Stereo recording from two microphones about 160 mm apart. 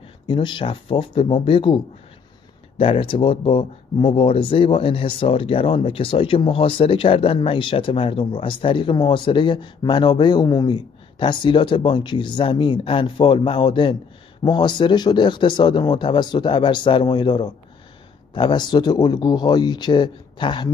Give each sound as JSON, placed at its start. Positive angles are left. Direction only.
{"t": 0.3, "sound": "speech", "side_deg": 30}
{"t": 2.8, "sound": "speech", "side_deg": 35}